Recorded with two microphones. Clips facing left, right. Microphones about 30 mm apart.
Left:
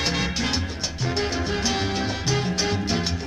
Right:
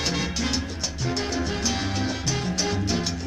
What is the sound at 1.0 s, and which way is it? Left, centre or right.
Salsa music, centre.